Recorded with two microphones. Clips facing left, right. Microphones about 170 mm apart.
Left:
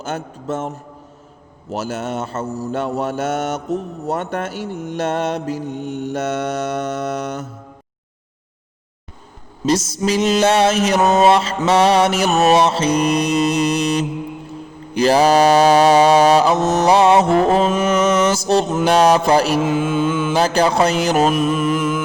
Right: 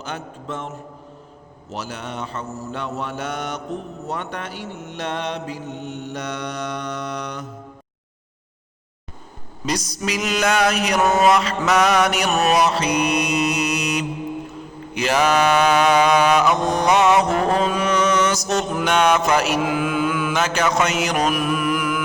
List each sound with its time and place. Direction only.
0.0 s mantra: 45° left (ahead or behind)
1.7 s mantra: 45° left (ahead or behind)
9.6 s mantra: 30° left (ahead or behind)
16.6 s mantra: 5° left (ahead or behind)
16.8 s mantra: 35° left (ahead or behind)